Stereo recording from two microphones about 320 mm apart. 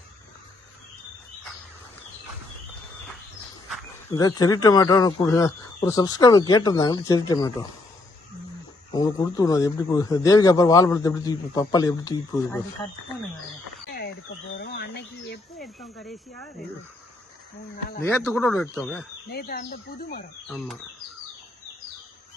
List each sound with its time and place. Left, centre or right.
4.1 s a man's voice: centre
8.9 s a man's voice: centre
14.6 s insect: left
16.0 s speech: centre
18.1 s a man's voice: centre
19.3 s speech: left